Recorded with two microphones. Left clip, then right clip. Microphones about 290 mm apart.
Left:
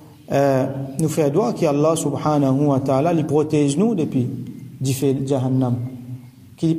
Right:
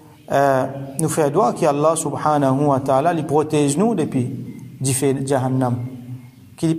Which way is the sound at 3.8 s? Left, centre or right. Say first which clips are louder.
Right 1 dB; right.